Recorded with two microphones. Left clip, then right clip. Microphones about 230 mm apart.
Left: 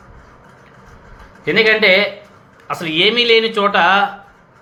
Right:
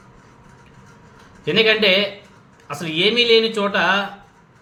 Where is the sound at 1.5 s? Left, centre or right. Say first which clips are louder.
Left 4 dB; centre.